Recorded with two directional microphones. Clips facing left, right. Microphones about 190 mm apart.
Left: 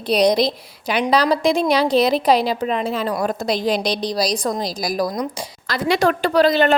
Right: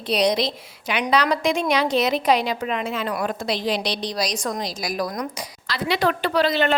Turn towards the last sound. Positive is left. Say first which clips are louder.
# left 5 dB
turn(degrees=40)  # may be behind; listen again after turning